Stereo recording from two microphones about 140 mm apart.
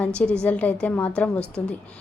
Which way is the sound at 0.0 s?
5° left (ahead or behind).